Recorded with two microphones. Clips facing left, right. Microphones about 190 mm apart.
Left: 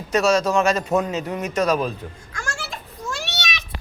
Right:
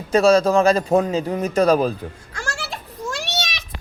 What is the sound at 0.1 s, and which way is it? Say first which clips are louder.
A man's voice: right 4 dB; 30° right (ahead or behind).